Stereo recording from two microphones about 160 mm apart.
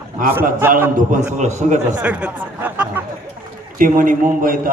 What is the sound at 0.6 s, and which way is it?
Speech, 10° right (ahead or behind).